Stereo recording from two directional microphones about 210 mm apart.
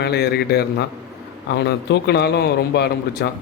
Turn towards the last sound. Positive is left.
turn(degrees=50)  # may be behind; listen again after turning